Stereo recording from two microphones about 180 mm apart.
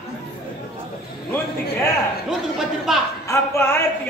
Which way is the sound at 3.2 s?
15° left (ahead or behind).